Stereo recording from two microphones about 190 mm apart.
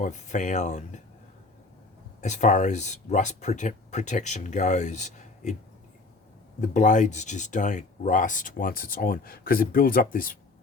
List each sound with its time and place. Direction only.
0.0 s speech: 40° left (ahead or behind)
2.2 s speech: 40° left (ahead or behind)
6.6 s speech: 40° left (ahead or behind)